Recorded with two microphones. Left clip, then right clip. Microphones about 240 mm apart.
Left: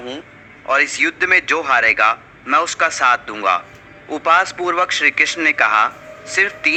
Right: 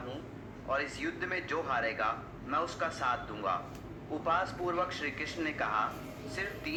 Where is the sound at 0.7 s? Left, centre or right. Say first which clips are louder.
Left 19 dB; left.